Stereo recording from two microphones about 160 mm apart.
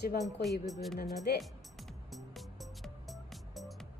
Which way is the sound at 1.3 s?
90° left.